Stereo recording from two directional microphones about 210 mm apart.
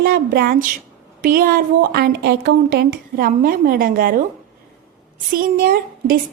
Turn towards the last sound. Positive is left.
turn(degrees=-45)  # may be behind; listen again after turning